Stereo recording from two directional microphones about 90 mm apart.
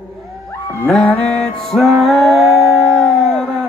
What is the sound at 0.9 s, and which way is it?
Music, 5° left (ahead or behind).